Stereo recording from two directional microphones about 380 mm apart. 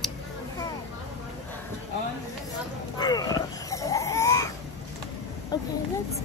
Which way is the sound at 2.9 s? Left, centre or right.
Centre.